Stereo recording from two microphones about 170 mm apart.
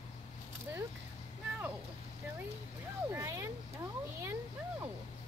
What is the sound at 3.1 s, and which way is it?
Vehicle, 15° right (ahead or behind).